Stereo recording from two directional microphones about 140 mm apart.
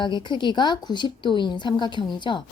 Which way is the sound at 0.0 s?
30° left (ahead or behind).